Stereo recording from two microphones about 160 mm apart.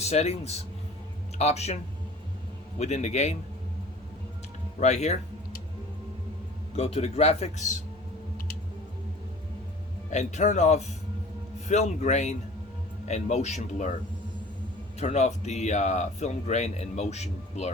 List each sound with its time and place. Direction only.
0.0 s a man's voice: 40° left (ahead or behind)
4.8 s speech: 45° left (ahead or behind)
6.7 s a man's voice: 40° left (ahead or behind)
10.1 s speech: 45° left (ahead or behind)
14.9 s speech: 45° left (ahead or behind)